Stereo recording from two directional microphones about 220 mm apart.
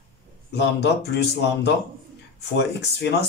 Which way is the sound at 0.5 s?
50° left (ahead or behind).